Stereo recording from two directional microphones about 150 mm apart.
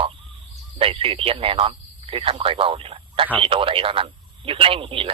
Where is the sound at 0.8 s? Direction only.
40° right (ahead or behind).